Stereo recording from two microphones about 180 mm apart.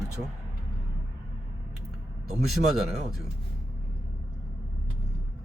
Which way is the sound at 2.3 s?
Centre (ahead or behind).